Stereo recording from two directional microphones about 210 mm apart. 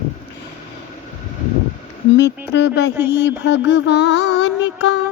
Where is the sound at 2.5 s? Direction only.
55° left (ahead or behind).